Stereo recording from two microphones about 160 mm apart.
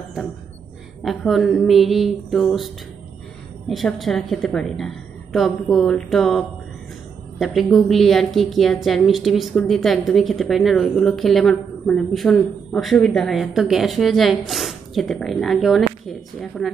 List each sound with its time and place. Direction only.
1.0 s a woman's voice: centre (ahead or behind)